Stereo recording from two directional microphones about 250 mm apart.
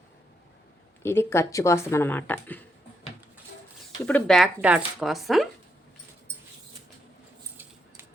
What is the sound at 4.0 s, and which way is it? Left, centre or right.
A woman's voice, centre.